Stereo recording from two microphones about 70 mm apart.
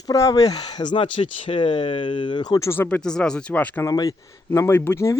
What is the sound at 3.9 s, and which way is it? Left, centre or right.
Speech, left.